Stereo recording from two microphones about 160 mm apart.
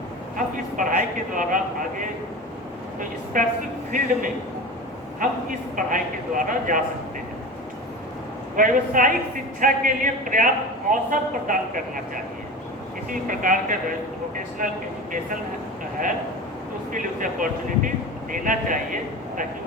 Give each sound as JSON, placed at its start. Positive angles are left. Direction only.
{"t": 0.3, "sound": "a man's voice", "side_deg": -55}
{"t": 3.3, "sound": "a man's voice", "side_deg": -55}
{"t": 5.2, "sound": "a man's voice", "side_deg": -55}
{"t": 8.5, "sound": "a man's voice", "side_deg": -55}
{"t": 16.9, "sound": "a man's voice", "side_deg": -55}